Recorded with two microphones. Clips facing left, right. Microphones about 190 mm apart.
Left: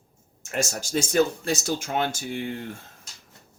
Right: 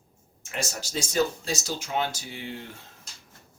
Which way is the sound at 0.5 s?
50° left (ahead or behind).